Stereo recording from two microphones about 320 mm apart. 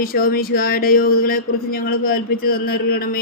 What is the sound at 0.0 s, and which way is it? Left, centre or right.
Speech, left.